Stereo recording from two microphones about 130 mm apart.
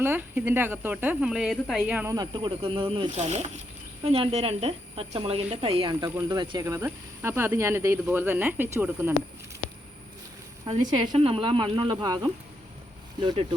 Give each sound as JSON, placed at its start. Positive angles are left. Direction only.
{"t": 0.0, "sound": "speech", "side_deg": -15}
{"t": 2.0, "sound": "speech", "side_deg": -30}
{"t": 3.1, "sound": "speech", "side_deg": -60}
{"t": 4.0, "sound": "speech", "side_deg": -45}
{"t": 6.6, "sound": "speech", "side_deg": -20}
{"t": 10.8, "sound": "speech", "side_deg": -40}